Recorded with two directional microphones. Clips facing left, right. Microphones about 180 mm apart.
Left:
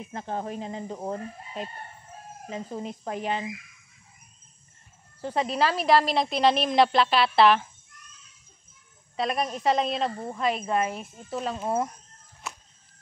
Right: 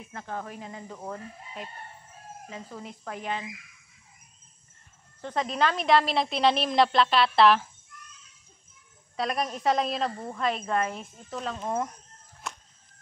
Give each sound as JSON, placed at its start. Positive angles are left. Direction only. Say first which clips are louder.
{"t": 0.0, "sound": "speech", "louder": "left 4 dB", "side_deg": 25}
{"t": 5.2, "sound": "a woman's voice", "louder": "left 2 dB", "side_deg": 5}
{"t": 9.1, "sound": "a woman's voice", "louder": "left 2 dB", "side_deg": 5}
{"t": 10.1, "sound": "speech", "louder": "left 2 dB", "side_deg": 10}
{"t": 12.4, "sound": "a sound", "louder": "even", "side_deg": 5}